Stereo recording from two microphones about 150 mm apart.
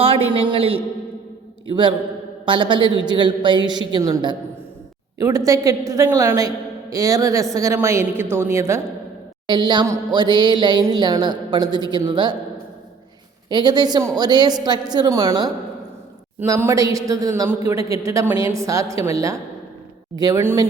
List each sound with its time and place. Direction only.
0.0 s a man's voice: 40° right (ahead or behind); by 8.8 s 20° right (ahead or behind)
9.5 s a woman's voice: 30° right (ahead or behind)
13.5 s a woman's voice: 30° right (ahead or behind)